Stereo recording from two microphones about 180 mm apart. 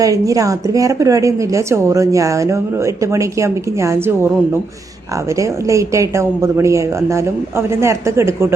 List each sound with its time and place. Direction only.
0.0 s a woman's voice: 20° right (ahead or behind)
5.3 s a woman's voice: 15° right (ahead or behind)